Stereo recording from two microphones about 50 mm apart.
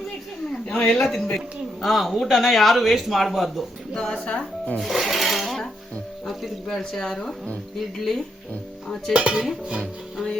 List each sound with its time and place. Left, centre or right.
0.5 s a sound: centre
0.9 s speech: centre
3.9 s speech: centre
4.8 s speech: centre
9.1 s dishes: centre
9.6 s speech: centre